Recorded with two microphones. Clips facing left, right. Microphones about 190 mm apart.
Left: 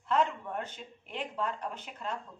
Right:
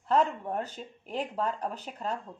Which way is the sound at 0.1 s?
35° right (ahead or behind).